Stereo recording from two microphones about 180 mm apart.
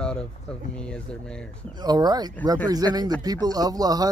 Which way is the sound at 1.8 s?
20° right (ahead or behind).